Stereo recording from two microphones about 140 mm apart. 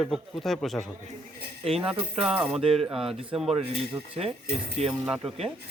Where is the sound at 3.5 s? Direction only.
40° right (ahead or behind).